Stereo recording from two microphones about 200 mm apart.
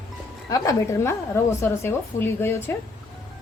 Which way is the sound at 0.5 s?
15° left (ahead or behind).